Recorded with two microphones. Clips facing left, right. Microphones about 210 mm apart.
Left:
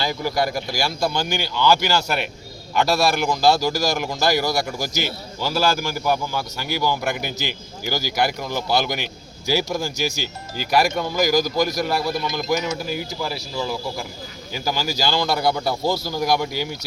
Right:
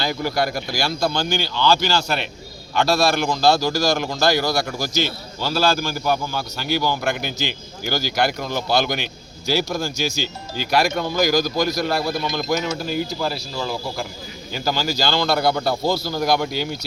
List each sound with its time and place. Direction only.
0.0 s a man's voice: 15° left (ahead or behind)